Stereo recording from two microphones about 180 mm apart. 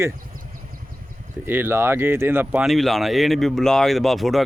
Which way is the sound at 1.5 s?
10° right (ahead or behind).